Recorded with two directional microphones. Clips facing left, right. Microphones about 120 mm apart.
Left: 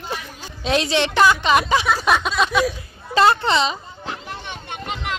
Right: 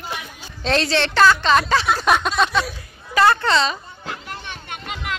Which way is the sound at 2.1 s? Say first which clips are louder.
Right 2 dB; centre (ahead or behind).